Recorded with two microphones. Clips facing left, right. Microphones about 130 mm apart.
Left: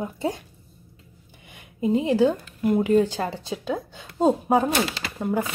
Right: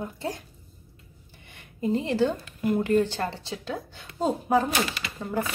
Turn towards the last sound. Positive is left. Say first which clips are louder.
# left 4 dB
turn(degrees=15)  # may be behind; listen again after turning